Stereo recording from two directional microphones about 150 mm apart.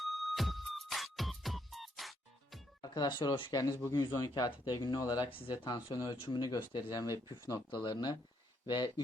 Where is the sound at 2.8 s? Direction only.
30° left (ahead or behind).